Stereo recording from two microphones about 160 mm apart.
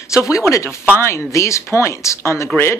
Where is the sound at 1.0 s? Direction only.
15° left (ahead or behind).